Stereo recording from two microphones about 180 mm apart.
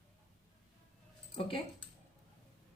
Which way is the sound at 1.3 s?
30° left (ahead or behind).